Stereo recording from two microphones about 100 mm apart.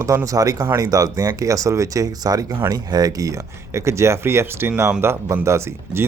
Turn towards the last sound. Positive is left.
turn(degrees=-25)  # may be behind; listen again after turning